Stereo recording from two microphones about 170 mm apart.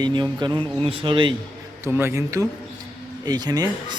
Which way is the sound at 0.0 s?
25° right (ahead or behind).